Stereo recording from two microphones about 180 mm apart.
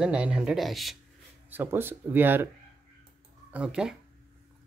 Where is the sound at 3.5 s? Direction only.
5° right (ahead or behind).